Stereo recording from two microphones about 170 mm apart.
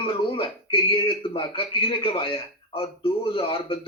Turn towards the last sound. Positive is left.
turn(degrees=30)  # may be behind; listen again after turning